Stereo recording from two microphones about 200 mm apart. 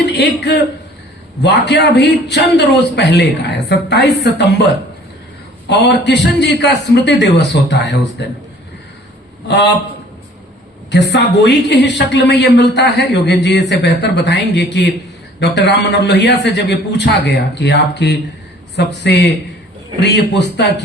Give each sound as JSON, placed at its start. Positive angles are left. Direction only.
{"t": 0.0, "sound": "a man's voice", "side_deg": 55}
{"t": 5.6, "sound": "a woman's voice", "side_deg": 60}
{"t": 10.9, "sound": "a woman's voice", "side_deg": 60}